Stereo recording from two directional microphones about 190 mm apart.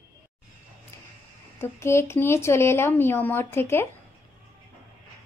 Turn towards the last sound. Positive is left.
turn(degrees=10)  # may be behind; listen again after turning